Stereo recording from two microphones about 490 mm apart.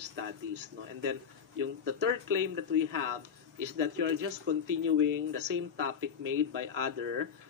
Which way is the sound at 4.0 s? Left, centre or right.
Right.